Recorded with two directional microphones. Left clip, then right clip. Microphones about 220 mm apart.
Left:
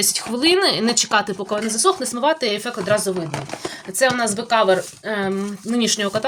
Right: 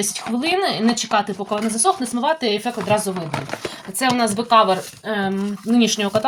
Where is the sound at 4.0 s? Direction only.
50° left (ahead or behind).